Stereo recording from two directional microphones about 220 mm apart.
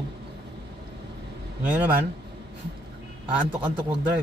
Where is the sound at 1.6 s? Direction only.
5° right (ahead or behind).